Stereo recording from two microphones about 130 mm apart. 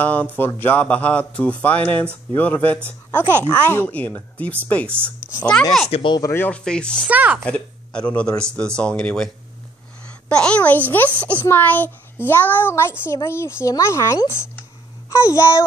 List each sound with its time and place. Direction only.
0.0 s speech: 10° left (ahead or behind)
5.9 s speech: 50° left (ahead or behind)
6.3 s speech: 10° left (ahead or behind)
7.1 s a woman's voice: 10° right (ahead or behind)
7.4 s speech: 10° left (ahead or behind)
10.3 s speech: 5° left (ahead or behind)
11.1 s a woman's voice: 15° right (ahead or behind)
11.4 s speech: 15° left (ahead or behind)